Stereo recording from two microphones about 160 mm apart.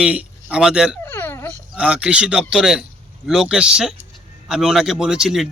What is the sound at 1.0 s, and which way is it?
Dog, 15° left (ahead or behind).